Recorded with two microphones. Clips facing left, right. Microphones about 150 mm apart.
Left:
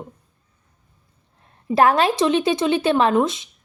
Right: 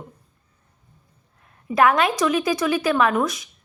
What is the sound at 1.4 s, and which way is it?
A woman's voice, 30° left (ahead or behind).